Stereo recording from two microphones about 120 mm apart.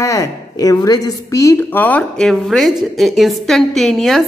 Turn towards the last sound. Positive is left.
turn(degrees=0)  # may be behind; listen again after turning